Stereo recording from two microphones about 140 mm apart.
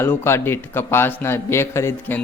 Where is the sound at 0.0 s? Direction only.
15° left (ahead or behind).